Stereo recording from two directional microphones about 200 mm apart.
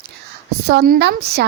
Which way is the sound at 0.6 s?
50° right (ahead or behind).